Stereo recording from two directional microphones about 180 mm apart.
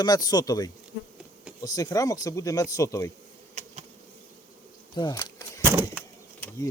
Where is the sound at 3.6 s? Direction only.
40° right (ahead or behind).